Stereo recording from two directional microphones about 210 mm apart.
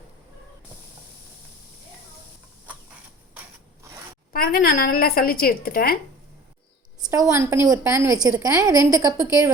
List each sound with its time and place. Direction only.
3.9 s zipper: 15° right (ahead or behind)
4.3 s a woman's voice: 45° left (ahead or behind)
7.1 s a woman's voice: 15° right (ahead or behind)